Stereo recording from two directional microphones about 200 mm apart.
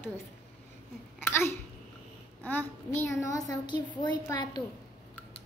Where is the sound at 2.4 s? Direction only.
10° left (ahead or behind).